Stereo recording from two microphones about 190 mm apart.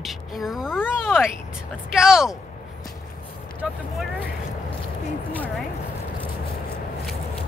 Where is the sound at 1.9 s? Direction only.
5° right (ahead or behind).